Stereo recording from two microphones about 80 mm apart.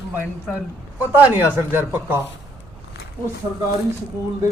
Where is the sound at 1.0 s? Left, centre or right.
Right.